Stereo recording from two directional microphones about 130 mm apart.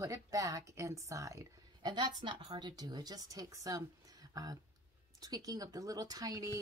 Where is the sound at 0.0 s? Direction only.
25° right (ahead or behind).